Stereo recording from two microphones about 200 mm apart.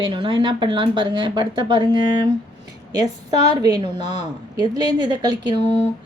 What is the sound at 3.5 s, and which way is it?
Speech, 20° right (ahead or behind).